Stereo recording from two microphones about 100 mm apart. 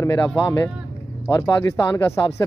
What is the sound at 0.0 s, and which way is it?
Speech, 30° left (ahead or behind).